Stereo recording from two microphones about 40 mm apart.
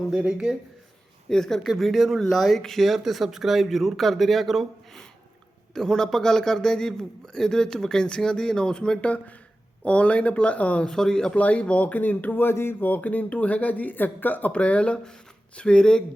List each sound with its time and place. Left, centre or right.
0.1 s speech: right
1.3 s a man's voice: centre
1.6 s speech: centre
5.7 s a man's voice: centre; by 10.8 s left
10.8 s a man's voice: centre
11.3 s speech: left
12.5 s speech: left
12.8 s speech: left
14.5 s speech: left